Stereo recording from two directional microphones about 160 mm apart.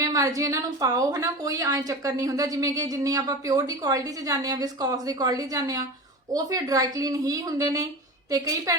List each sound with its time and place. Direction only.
0.0 s a woman's voice: 20° right (ahead or behind)